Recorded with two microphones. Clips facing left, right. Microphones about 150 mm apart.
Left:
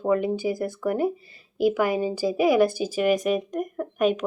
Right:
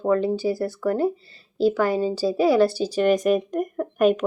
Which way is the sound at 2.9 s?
5° left (ahead or behind).